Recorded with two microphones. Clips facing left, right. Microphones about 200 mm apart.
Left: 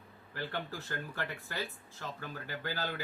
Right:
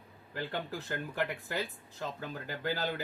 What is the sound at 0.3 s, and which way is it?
Speech, 15° right (ahead or behind).